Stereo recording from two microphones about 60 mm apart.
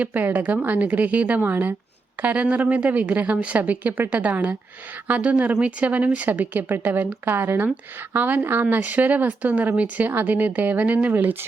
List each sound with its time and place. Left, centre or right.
0.0 s speech: right